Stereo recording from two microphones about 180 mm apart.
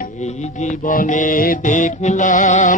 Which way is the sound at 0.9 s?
45° left (ahead or behind).